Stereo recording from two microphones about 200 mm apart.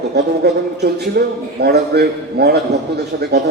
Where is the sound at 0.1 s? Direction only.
55° right (ahead or behind).